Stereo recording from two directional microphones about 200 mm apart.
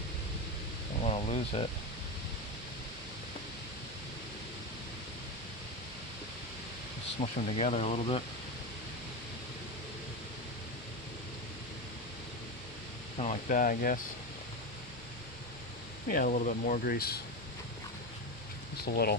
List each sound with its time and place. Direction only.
1.0 s a sound: 30° left (ahead or behind)
7.2 s speech: 35° left (ahead or behind)
13.1 s speech: 40° left (ahead or behind)
16.0 s speech: 45° left (ahead or behind)
18.9 s speech: 50° left (ahead or behind)